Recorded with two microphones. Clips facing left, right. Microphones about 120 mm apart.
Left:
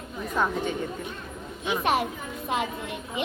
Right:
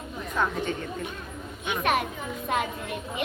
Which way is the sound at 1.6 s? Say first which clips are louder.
Left 1 dB; 30° left (ahead or behind).